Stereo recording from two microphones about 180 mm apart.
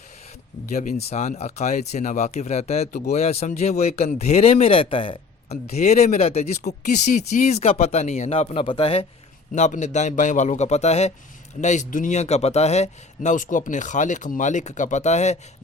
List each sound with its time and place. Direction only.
0.6 s speech: 40° left (ahead or behind)